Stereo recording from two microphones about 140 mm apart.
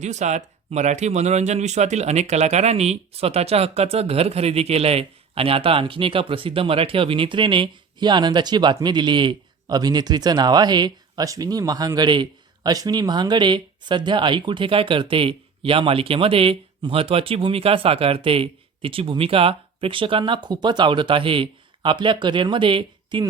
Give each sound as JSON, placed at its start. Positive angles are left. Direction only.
{"t": 0.0, "sound": "speech", "side_deg": -55}